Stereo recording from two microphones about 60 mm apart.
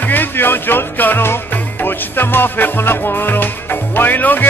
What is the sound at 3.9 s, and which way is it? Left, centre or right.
Speech, left.